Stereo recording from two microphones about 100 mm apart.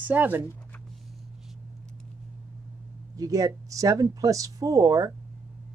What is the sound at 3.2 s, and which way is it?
Speech, 35° right (ahead or behind).